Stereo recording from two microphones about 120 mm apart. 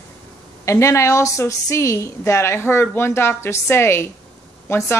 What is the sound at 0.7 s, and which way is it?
A woman's voice, 25° left (ahead or behind).